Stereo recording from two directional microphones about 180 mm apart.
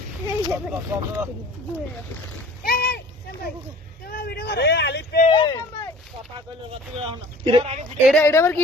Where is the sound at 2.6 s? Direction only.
55° left (ahead or behind).